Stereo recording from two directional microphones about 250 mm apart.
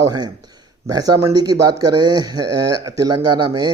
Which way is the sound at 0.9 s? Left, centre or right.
Centre.